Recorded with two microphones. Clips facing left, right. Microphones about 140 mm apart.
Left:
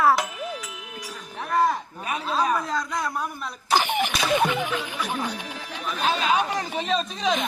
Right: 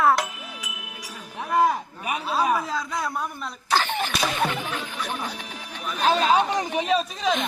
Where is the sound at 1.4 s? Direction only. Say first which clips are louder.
Right 1 dB; 10° right (ahead or behind).